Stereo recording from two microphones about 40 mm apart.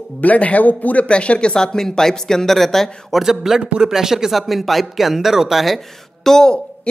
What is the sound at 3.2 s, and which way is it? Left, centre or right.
A man's voice, centre.